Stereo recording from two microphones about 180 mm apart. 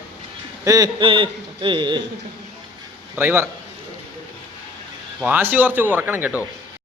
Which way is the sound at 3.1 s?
15° right (ahead or behind).